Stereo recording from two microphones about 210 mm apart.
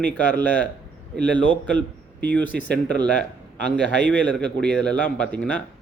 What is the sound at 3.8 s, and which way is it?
Speech, 55° right (ahead or behind).